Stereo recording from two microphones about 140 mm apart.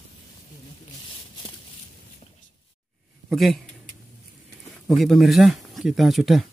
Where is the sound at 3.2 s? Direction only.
Centre (ahead or behind).